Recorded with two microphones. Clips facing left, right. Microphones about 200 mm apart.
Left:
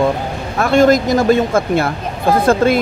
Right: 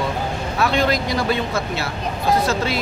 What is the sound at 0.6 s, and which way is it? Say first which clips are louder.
Speech: left 9 dB; 45° left (ahead or behind).